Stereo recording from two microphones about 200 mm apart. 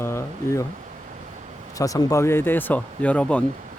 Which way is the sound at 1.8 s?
15° left (ahead or behind).